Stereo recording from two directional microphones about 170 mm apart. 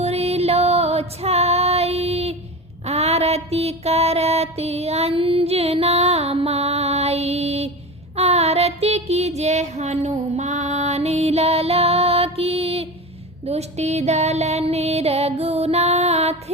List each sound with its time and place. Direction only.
0.0 s female singing: 35° right (ahead or behind)
2.8 s a sound: 40° right (ahead or behind)
13.4 s music: 40° right (ahead or behind)